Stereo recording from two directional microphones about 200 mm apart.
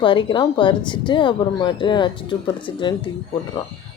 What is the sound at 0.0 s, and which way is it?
Speech, 25° left (ahead or behind).